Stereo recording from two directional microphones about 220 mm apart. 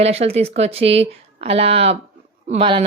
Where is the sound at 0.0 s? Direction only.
25° right (ahead or behind).